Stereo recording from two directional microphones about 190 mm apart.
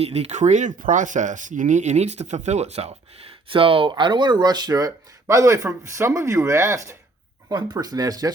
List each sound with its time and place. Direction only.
0.0 s speech: 35° right (ahead or behind)